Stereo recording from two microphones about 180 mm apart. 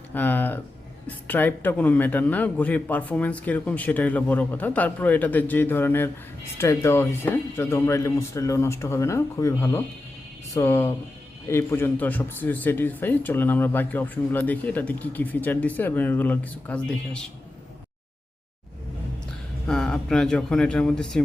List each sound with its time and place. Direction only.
0.1 s a man's voice: 10° left (ahead or behind)
19.6 s speech: 5° left (ahead or behind)